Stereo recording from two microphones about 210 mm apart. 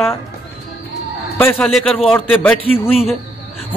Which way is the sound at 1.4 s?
10° left (ahead or behind).